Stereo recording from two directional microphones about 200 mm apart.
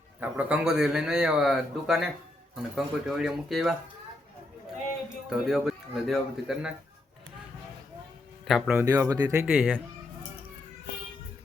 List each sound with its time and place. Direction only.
0.2 s a man's voice: 5° right (ahead or behind)
5.0 s a man's voice: centre (ahead or behind)
8.4 s a man's voice: centre (ahead or behind)
8.8 s speech: 15° right (ahead or behind)